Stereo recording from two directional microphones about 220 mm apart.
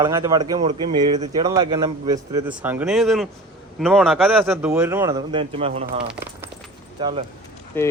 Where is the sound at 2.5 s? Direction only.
5° right (ahead or behind); by 5.8 s 25° right (ahead or behind).